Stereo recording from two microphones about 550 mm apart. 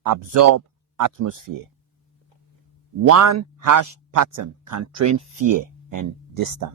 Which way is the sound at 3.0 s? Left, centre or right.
Right.